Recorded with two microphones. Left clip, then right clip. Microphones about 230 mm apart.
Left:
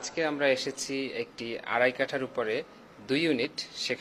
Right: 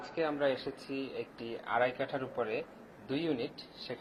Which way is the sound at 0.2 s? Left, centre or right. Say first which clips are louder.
Left 5 dB; left.